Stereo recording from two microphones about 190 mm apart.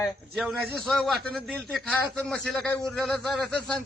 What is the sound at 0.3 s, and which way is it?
A man's voice, centre (ahead or behind).